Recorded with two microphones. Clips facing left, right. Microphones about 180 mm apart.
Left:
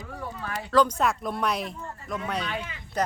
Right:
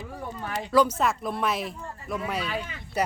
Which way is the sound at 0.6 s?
10° right (ahead or behind).